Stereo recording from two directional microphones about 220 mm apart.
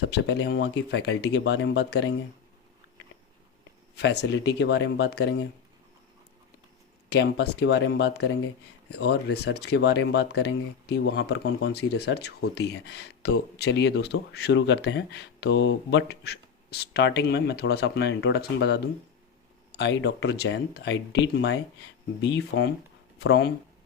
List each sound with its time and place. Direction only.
0.1 s speech: 50° left (ahead or behind)
3.9 s speech: 50° left (ahead or behind)
7.1 s speech: 50° left (ahead or behind)